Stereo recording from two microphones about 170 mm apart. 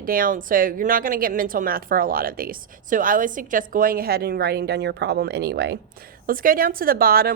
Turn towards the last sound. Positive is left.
turn(degrees=-60)  # may be behind; listen again after turning